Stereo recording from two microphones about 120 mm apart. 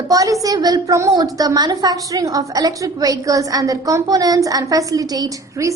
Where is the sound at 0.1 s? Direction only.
30° right (ahead or behind).